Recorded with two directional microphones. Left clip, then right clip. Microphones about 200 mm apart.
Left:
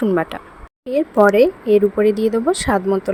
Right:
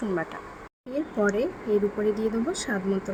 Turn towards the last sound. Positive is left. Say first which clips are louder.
# left 11 dB
turn(degrees=45)  # may be behind; listen again after turning